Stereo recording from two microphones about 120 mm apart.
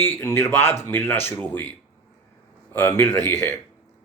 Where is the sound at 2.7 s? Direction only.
20° left (ahead or behind).